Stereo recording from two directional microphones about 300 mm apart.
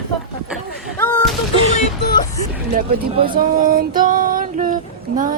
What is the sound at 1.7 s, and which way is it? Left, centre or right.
Speech, left.